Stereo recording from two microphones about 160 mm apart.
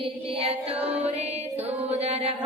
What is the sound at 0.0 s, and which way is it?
Music, 35° right (ahead or behind).